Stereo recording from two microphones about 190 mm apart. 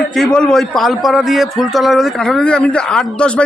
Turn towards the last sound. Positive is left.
turn(degrees=5)  # may be behind; listen again after turning